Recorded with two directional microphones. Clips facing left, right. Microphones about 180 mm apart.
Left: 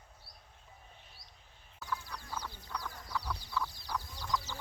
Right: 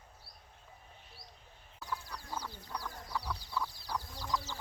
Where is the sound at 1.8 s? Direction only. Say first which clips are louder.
Left 1 dB; 10° right (ahead or behind).